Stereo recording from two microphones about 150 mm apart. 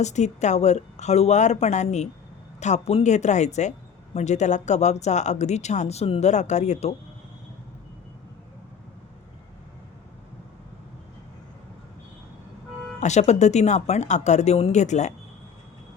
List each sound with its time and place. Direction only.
0.0 s speech: 50° left (ahead or behind)
13.0 s speech: 50° left (ahead or behind)